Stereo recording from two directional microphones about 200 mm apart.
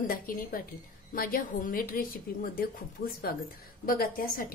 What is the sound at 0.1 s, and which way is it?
A woman's voice, 45° left (ahead or behind).